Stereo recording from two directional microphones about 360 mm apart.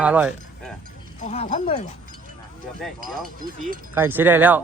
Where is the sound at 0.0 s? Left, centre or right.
Centre.